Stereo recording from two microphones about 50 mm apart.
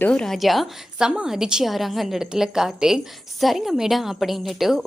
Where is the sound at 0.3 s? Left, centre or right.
Centre.